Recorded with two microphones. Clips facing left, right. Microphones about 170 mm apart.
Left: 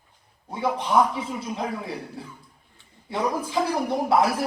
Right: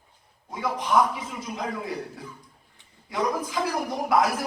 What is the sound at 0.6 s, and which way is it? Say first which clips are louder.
A man's voice: left 2 dB; 30° left (ahead or behind).